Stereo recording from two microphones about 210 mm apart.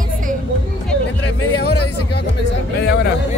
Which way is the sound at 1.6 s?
50° left (ahead or behind).